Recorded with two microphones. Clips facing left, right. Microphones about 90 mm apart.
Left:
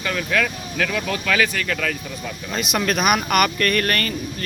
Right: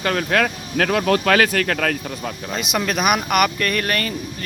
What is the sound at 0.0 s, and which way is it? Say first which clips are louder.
Speech: right 3 dB; 50° right (ahead or behind).